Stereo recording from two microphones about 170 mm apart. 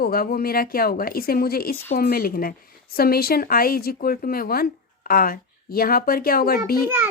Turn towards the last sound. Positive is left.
turn(degrees=-10)  # may be behind; listen again after turning